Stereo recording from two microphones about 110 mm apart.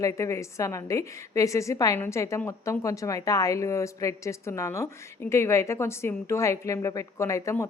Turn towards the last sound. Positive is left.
turn(degrees=25)  # may be behind; listen again after turning